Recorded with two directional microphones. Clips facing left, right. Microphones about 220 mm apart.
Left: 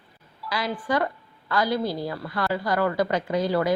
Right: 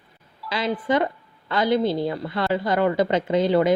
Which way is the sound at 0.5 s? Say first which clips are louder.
Right 4 dB; 25° right (ahead or behind).